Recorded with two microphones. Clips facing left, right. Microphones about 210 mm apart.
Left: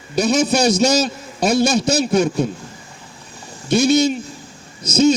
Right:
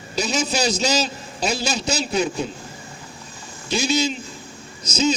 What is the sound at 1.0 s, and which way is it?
A man's voice, 50° left (ahead or behind).